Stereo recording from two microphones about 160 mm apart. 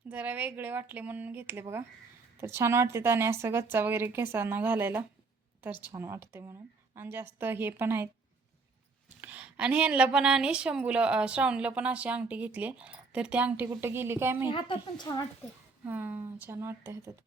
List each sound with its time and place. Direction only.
0.1 s a woman's voice: 10° right (ahead or behind)
9.2 s a woman's voice: 10° right (ahead or behind)
14.4 s a woman's voice: 30° left (ahead or behind)
15.8 s a woman's voice: 15° right (ahead or behind)